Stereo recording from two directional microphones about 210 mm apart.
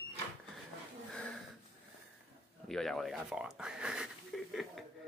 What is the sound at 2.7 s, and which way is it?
Speech, centre (ahead or behind).